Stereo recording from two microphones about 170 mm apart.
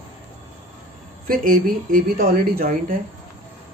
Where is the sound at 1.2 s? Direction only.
55° right (ahead or behind).